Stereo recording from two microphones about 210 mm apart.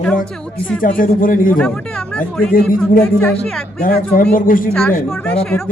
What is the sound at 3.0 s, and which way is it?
Speech, 5° left (ahead or behind).